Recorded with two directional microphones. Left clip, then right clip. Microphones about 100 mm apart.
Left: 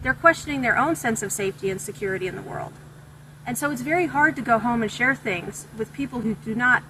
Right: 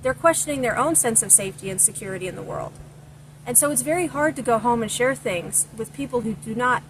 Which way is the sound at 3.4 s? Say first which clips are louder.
Right 3 dB; 55° right (ahead or behind).